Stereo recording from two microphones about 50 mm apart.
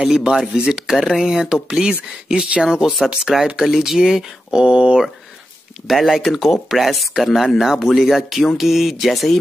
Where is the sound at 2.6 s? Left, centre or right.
Centre.